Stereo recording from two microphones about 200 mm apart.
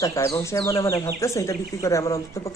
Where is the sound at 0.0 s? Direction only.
15° left (ahead or behind).